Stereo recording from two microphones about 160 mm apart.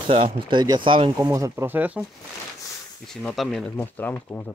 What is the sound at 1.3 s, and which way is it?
Speech, 20° right (ahead or behind).